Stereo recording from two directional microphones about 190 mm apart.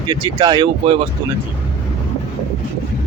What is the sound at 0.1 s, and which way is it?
Speech, 20° right (ahead or behind).